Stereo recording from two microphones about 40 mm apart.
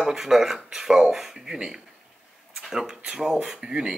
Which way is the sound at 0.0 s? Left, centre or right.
Centre.